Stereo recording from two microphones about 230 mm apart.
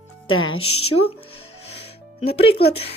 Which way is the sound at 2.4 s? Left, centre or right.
Left.